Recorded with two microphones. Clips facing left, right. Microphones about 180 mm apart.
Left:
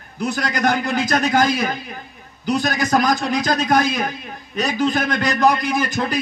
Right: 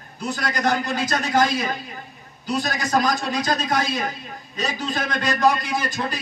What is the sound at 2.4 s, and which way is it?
A man's voice, 80° left.